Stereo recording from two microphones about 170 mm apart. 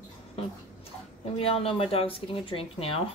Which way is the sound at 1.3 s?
35° left (ahead or behind).